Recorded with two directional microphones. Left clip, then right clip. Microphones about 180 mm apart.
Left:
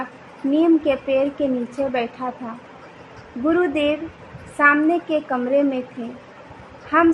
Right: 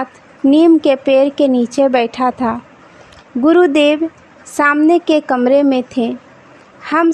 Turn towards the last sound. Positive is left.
turn(degrees=-65)  # may be behind; listen again after turning